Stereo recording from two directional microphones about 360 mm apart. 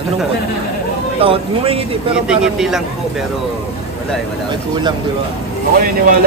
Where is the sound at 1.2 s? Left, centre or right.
Centre.